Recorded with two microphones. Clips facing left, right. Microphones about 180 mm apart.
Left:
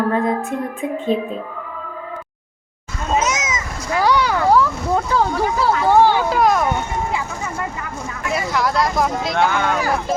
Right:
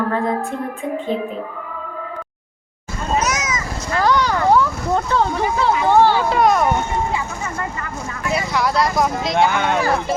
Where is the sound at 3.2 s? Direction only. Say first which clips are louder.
Even; 25° left (ahead or behind).